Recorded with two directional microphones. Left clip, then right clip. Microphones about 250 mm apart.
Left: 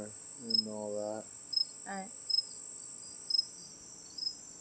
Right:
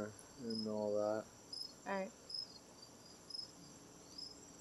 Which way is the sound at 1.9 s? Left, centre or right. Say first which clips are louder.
Even; right.